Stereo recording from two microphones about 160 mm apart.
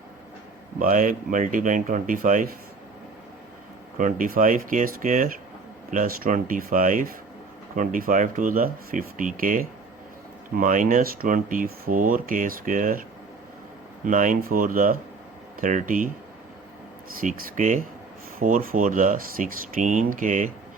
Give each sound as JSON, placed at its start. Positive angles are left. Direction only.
{"t": 0.8, "sound": "speech", "side_deg": -55}
{"t": 3.9, "sound": "speech", "side_deg": -55}
{"t": 17.2, "sound": "speech", "side_deg": -50}